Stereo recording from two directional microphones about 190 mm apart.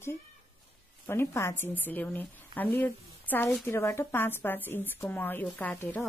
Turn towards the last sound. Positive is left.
turn(degrees=10)  # may be behind; listen again after turning